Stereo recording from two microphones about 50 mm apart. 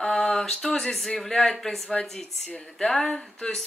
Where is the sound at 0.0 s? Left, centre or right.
Centre.